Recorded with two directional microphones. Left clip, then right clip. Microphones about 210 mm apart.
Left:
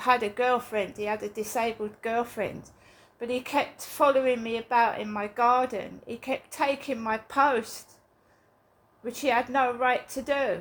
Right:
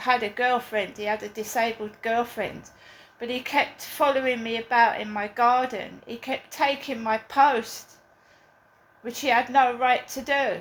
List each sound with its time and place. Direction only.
0.0 s a woman's voice: 40° left (ahead or behind)
9.0 s a woman's voice: 35° left (ahead or behind)